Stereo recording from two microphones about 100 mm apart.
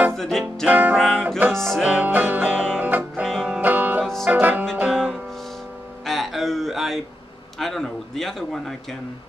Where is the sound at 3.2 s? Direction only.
Centre (ahead or behind).